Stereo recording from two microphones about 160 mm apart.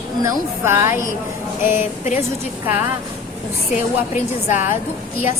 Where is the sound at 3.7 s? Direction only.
50° left (ahead or behind).